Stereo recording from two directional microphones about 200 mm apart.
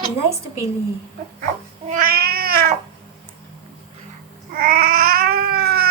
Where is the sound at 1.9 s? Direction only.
45° right (ahead or behind).